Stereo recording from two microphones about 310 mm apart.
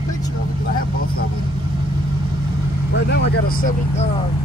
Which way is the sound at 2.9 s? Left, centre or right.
Left.